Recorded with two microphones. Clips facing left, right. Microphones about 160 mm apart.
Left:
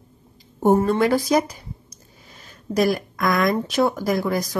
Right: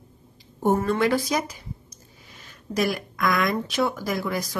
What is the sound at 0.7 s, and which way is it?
Speech, 30° left (ahead or behind).